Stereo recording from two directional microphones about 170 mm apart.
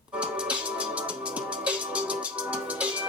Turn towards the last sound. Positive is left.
turn(degrees=-5)  # may be behind; listen again after turning